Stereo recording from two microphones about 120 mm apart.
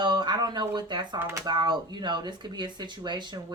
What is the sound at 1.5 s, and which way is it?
Speech, 35° right (ahead or behind).